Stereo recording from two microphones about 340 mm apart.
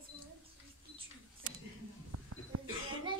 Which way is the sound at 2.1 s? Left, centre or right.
Right.